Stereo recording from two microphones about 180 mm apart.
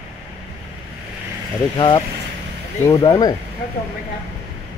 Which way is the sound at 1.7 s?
25° left (ahead or behind).